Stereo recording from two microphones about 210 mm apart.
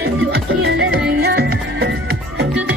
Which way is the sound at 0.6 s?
55° right (ahead or behind).